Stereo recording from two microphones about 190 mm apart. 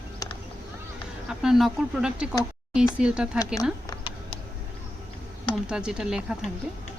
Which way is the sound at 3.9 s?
25° left (ahead or behind).